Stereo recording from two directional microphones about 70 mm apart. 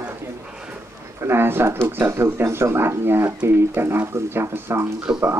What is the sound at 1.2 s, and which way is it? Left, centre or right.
Speech, right.